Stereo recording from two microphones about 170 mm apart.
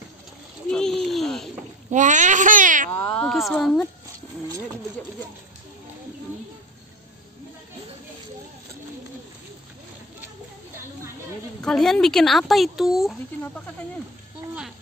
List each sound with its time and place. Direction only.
0.7 s a sound: 5° left (ahead or behind)
1.9 s a child's voice: 45° right (ahead or behind)
2.9 s speech: 10° left (ahead or behind)
11.6 s speech: centre (ahead or behind)